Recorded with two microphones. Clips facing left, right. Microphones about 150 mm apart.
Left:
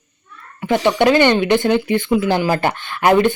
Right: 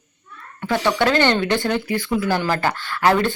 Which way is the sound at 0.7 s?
15° left (ahead or behind).